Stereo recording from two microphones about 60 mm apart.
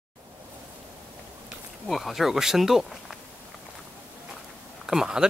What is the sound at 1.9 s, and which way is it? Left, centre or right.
Speech, centre.